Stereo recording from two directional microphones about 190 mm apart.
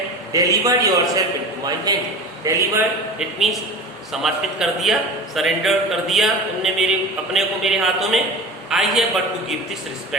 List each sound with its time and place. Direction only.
0.3 s a man's voice: 20° right (ahead or behind)
3.2 s a man's voice: centre (ahead or behind)